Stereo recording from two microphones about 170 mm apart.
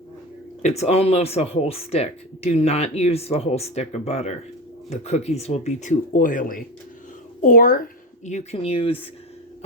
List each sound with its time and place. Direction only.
0.6 s a woman's voice: 40° left (ahead or behind)